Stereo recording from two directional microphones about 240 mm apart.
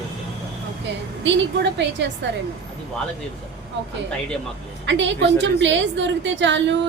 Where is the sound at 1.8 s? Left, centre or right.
Right.